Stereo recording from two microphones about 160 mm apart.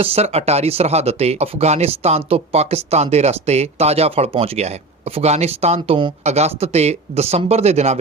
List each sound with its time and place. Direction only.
0.0 s speech: 40° right (ahead or behind)